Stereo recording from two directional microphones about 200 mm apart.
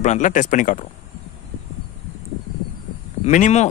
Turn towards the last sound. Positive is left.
turn(degrees=35)  # may be behind; listen again after turning